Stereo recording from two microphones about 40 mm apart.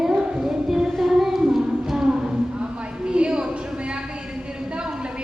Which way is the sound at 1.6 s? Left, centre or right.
Centre.